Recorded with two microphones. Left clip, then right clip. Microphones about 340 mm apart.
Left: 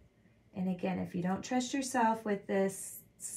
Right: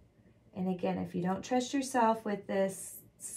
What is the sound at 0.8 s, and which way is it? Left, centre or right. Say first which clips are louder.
Speech: right 2 dB; centre.